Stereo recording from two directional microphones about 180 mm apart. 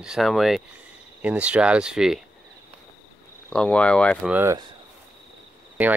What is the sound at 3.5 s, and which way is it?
Speech, 5° left (ahead or behind).